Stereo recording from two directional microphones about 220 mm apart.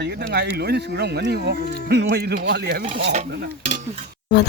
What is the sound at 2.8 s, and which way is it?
Stir, 35° right (ahead or behind).